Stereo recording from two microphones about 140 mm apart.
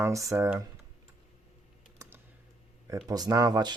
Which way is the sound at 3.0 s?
30° right (ahead or behind).